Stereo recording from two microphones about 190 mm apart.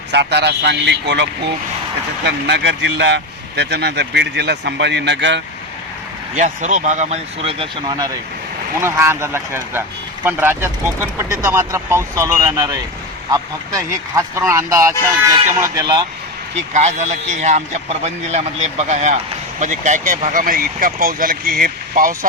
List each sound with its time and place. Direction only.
0.1 s speech: 65° right (ahead or behind)
6.3 s a man's voice: 40° right (ahead or behind); by 16.0 s 20° right (ahead or behind)
16.7 s a man's voice: 40° right (ahead or behind)